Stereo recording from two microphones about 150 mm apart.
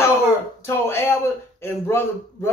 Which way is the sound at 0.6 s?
15° left (ahead or behind).